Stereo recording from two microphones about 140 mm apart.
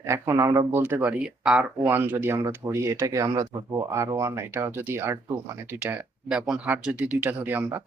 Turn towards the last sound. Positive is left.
turn(degrees=-15)  # may be behind; listen again after turning